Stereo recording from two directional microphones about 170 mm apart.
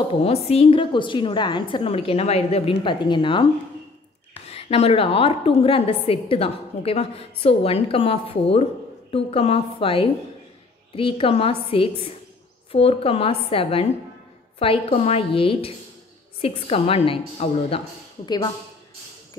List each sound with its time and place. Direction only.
0.1 s a woman's voice: 35° left (ahead or behind)
4.5 s a woman's voice: 35° left (ahead or behind)